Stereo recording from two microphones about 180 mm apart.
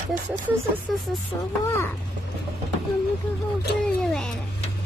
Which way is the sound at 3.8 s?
5° left (ahead or behind).